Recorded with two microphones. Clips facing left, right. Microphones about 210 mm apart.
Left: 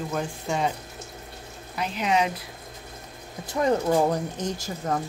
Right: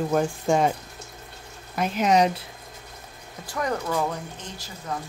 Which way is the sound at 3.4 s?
25° left (ahead or behind).